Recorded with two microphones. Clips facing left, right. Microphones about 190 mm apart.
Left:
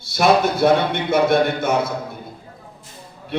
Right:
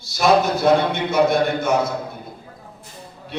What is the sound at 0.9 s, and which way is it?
Speech, 55° left (ahead or behind).